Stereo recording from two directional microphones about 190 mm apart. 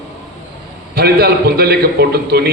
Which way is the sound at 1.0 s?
55° right (ahead or behind).